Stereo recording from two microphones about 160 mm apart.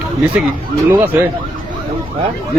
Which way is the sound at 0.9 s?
15° right (ahead or behind).